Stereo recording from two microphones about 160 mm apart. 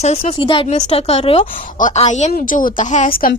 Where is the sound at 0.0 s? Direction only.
40° left (ahead or behind).